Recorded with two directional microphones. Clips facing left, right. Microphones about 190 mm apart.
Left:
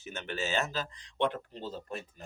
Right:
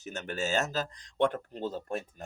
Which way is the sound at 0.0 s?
45° right (ahead or behind).